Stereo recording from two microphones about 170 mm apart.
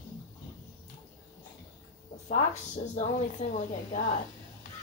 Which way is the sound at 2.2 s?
45° left (ahead or behind).